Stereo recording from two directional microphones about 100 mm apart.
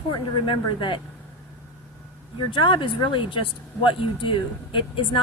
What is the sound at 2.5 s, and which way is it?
A woman's voice, 50° left (ahead or behind).